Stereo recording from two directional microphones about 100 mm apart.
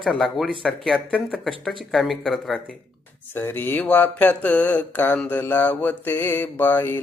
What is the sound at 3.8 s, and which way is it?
Speech, 15° left (ahead or behind).